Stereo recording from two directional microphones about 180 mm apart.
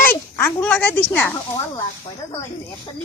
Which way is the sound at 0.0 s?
10° left (ahead or behind).